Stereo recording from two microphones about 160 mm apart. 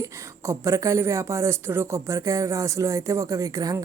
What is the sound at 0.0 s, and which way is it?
A woman's voice, 20° right (ahead or behind).